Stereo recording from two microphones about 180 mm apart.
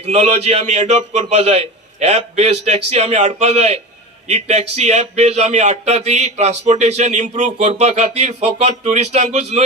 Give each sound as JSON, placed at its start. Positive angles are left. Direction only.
{"t": 0.0, "sound": "speech", "side_deg": -40}